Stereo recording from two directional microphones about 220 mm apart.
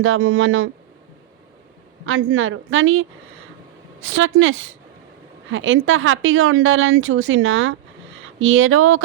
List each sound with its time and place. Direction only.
0.0 s speech: 65° right (ahead or behind)
2.0 s a woman's voice: 65° right (ahead or behind)